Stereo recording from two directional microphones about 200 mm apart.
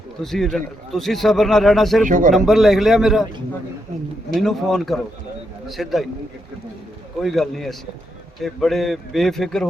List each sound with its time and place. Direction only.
0.2 s a man's voice: centre (ahead or behind)
2.0 s speech: 40° right (ahead or behind)
2.3 s a man's voice: centre (ahead or behind)
4.3 s a man's voice: centre (ahead or behind)
7.2 s a man's voice: centre (ahead or behind)